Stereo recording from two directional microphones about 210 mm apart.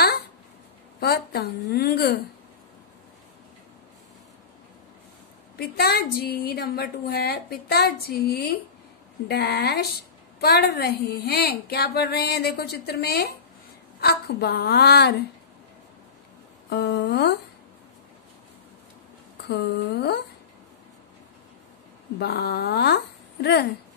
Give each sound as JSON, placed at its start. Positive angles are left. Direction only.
{"t": 0.9, "sound": "a woman's voice", "side_deg": 50}
{"t": 5.6, "sound": "a woman's voice", "side_deg": 50}
{"t": 16.6, "sound": "a woman's voice", "side_deg": 55}
{"t": 19.4, "sound": "a woman's voice", "side_deg": 50}
{"t": 22.2, "sound": "a woman's voice", "side_deg": 50}